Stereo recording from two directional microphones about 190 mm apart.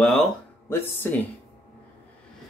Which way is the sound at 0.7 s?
10° left (ahead or behind).